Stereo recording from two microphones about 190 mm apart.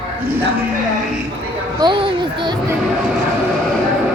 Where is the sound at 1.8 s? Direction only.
25° right (ahead or behind).